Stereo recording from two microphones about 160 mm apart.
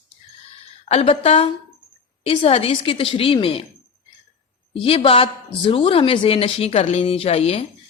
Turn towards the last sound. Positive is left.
turn(degrees=40)  # may be behind; listen again after turning